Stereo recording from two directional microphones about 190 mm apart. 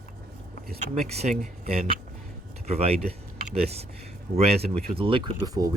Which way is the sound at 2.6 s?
35° right (ahead or behind).